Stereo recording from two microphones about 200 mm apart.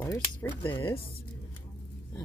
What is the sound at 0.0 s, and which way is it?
Speech, 10° left (ahead or behind).